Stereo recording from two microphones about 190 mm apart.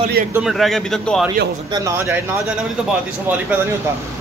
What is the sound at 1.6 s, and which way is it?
Speech, 20° right (ahead or behind).